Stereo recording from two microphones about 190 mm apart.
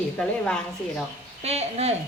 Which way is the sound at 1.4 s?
35° right (ahead or behind).